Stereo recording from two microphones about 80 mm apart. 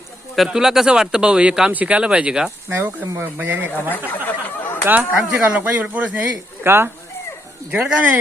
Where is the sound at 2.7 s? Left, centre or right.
Right.